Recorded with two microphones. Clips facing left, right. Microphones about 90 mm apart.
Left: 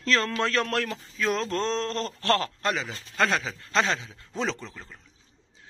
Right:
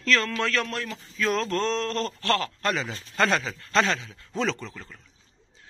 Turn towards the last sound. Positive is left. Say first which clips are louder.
# right 2 dB
turn(degrees=15)  # may be behind; listen again after turning